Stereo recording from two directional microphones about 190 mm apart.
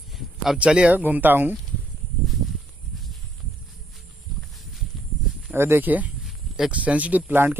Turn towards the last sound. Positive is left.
turn(degrees=-10)  # may be behind; listen again after turning